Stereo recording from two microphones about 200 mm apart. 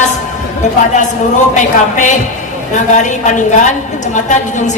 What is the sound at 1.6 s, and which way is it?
A woman's voice, 40° left (ahead or behind).